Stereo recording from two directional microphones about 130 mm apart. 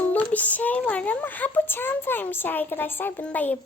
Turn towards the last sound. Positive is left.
turn(degrees=10)  # may be behind; listen again after turning